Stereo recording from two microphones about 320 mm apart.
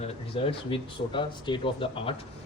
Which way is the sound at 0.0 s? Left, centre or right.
Centre.